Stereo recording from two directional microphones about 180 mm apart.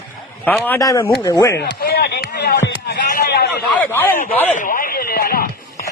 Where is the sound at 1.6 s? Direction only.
65° left (ahead or behind).